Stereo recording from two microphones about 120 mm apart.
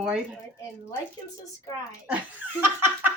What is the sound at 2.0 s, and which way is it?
Speech, 15° right (ahead or behind).